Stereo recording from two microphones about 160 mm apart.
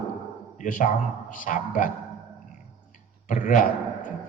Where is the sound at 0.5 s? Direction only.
55° left (ahead or behind).